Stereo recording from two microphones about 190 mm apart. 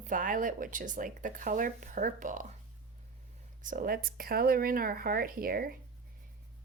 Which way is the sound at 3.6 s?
45° right (ahead or behind).